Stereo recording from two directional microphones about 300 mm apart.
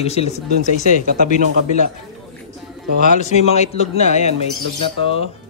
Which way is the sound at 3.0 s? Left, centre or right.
Left.